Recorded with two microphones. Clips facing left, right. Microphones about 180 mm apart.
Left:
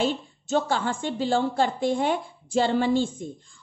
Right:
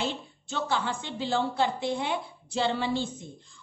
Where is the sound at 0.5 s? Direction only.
45° left (ahead or behind).